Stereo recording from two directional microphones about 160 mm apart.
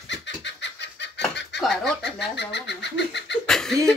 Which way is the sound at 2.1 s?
90° left.